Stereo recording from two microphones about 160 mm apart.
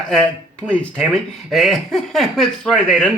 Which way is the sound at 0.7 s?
10° left (ahead or behind).